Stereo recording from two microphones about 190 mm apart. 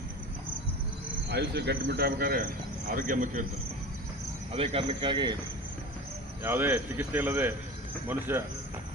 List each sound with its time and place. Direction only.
1.3 s speech: 60° right (ahead or behind)
4.5 s speech: 30° right (ahead or behind)
6.4 s speech: 10° right (ahead or behind)